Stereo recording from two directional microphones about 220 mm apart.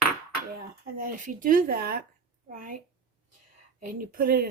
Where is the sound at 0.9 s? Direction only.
40° right (ahead or behind).